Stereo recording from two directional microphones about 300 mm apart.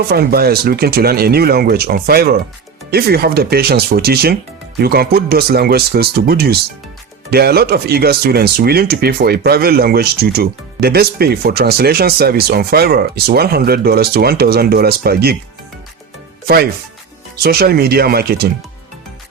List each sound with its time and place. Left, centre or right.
0.1 s speech: right
17.3 s speech: right